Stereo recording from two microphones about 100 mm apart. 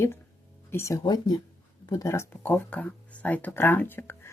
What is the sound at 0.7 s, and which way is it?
Speech, 30° left (ahead or behind).